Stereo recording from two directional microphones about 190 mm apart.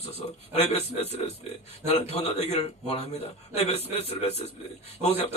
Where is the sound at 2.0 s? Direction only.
35° left (ahead or behind).